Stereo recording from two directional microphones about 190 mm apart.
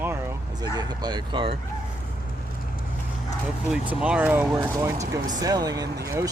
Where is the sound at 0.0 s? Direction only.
10° right (ahead or behind).